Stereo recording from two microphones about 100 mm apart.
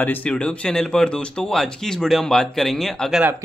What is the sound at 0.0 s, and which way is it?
Speech, 15° left (ahead or behind).